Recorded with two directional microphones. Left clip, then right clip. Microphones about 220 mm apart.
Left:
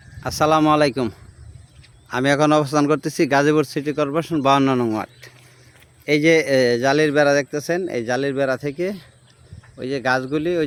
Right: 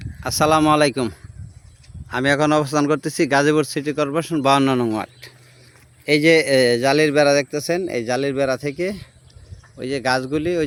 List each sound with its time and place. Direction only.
0.2 s speech: centre (ahead or behind)